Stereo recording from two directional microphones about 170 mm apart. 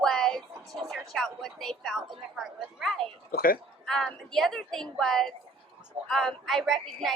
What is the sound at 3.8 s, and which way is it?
A woman's voice, 5° left (ahead or behind).